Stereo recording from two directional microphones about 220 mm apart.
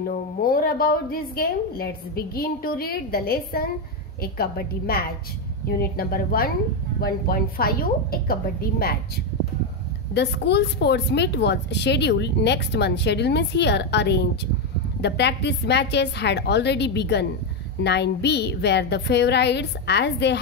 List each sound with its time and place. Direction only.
0.4 s a woman's voice: 40° left (ahead or behind)